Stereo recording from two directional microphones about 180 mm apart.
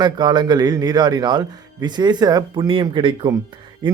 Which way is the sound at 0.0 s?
25° right (ahead or behind).